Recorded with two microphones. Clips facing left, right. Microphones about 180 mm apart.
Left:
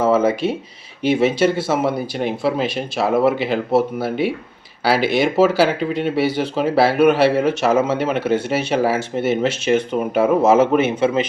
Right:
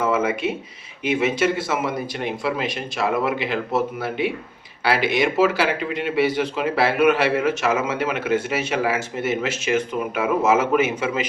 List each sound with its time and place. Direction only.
0.0 s a man's voice: 35° left (ahead or behind)